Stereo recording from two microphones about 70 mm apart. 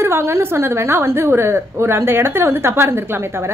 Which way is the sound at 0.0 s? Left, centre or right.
Right.